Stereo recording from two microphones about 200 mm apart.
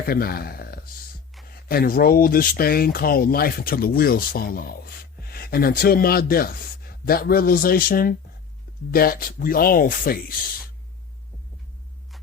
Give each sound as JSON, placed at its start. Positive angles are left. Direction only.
{"t": 0.0, "sound": "speech", "side_deg": 50}